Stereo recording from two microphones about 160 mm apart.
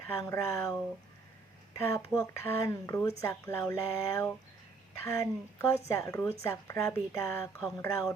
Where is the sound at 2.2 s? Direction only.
20° left (ahead or behind).